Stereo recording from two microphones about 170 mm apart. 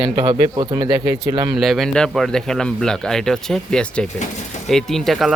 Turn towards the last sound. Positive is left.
turn(degrees=0)  # may be behind; listen again after turning